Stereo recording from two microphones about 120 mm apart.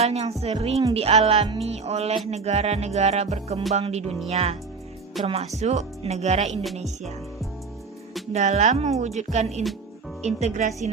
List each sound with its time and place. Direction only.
0.0 s music: 60° right (ahead or behind)
5.5 s speech: 65° right (ahead or behind)
6.5 s music: centre (ahead or behind)
8.3 s speech: 70° right (ahead or behind)